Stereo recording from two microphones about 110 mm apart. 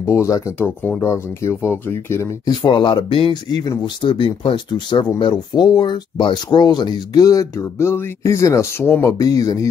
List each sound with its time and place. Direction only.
0.0 s speech: 25° left (ahead or behind)
2.4 s speech: 45° left (ahead or behind); by 9.1 s 25° left (ahead or behind)
9.2 s speech: 35° left (ahead or behind)